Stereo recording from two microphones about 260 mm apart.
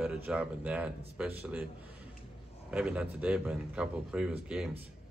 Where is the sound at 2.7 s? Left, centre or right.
Centre.